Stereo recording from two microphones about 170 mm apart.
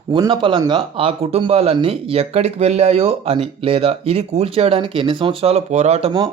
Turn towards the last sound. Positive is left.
turn(degrees=-30)  # may be behind; listen again after turning